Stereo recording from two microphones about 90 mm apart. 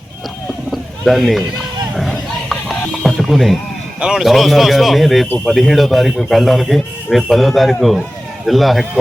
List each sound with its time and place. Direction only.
0.7 s a sound: centre (ahead or behind)
2.0 s music: centre (ahead or behind)
4.0 s a man's voice: 5° right (ahead or behind)